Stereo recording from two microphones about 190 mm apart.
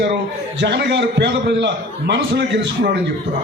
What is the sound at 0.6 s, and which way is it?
A man's voice, 65° right (ahead or behind).